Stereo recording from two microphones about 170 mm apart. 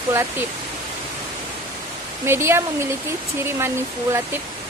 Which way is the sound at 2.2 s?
15° right (ahead or behind).